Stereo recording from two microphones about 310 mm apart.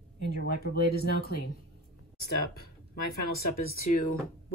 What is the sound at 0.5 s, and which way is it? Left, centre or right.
Speech, left.